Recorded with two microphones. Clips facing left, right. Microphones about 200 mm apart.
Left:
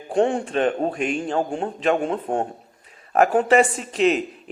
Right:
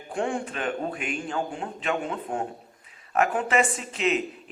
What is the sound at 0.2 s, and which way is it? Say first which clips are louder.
A man's voice: left 9 dB; 25° left (ahead or behind).